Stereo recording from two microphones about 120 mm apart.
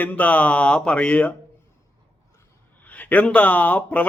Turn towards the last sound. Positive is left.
turn(degrees=15)  # may be behind; listen again after turning